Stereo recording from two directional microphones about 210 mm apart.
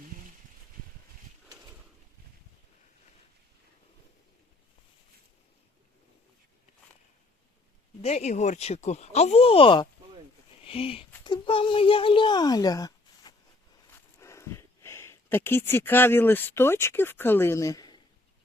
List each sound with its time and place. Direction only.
8.0 s a child's voice: 30° left (ahead or behind)